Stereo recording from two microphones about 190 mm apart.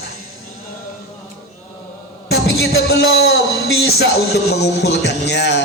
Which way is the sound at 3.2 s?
55° left (ahead or behind).